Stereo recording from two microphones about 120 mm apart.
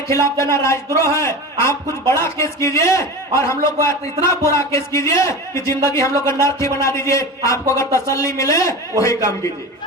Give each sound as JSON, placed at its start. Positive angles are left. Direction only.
{"t": 0.3, "sound": "a man's voice", "side_deg": 25}